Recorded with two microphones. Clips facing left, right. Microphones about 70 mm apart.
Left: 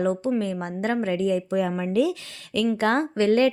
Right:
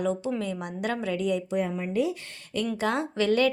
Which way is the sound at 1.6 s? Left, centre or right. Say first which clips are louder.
Left 4 dB; left.